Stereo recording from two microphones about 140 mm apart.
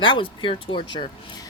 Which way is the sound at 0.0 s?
35° left (ahead or behind).